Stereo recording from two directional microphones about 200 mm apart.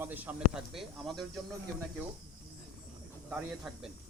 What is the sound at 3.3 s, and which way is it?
Speech, 5° right (ahead or behind).